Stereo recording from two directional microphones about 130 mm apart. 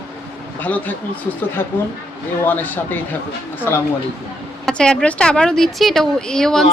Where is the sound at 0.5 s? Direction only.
10° left (ahead or behind).